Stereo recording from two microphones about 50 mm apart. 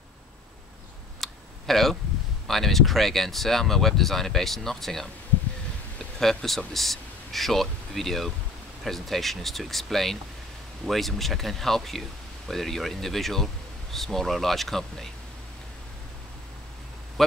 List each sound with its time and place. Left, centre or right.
1.2 s typing: centre
2.4 s speech: centre
6.1 s speech: centre